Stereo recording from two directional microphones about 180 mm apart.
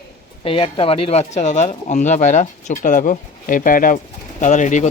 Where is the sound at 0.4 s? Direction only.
30° left (ahead or behind).